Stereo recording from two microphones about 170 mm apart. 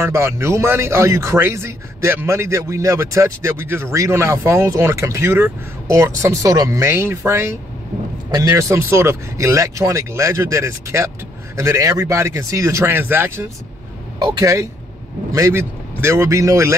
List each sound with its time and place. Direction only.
0.0 s speech: 15° right (ahead or behind)